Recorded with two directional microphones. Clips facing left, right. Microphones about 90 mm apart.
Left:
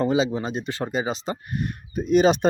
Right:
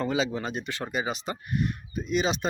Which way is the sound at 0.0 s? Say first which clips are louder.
Left 5 dB; 25° left (ahead or behind).